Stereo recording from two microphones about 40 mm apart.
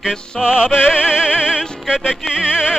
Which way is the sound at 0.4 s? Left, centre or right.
Right.